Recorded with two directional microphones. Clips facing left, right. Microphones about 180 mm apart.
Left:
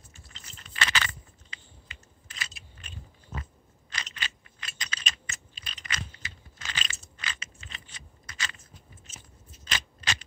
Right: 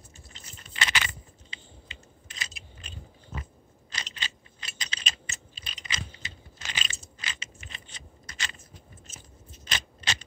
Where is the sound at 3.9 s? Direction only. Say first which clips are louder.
Left 1 dB; 25° right (ahead or behind).